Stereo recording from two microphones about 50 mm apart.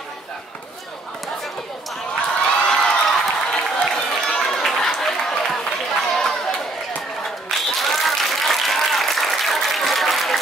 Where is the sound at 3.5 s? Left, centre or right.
Centre.